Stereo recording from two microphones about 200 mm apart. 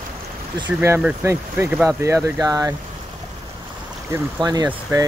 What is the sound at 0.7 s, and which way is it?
Speech, 10° right (ahead or behind).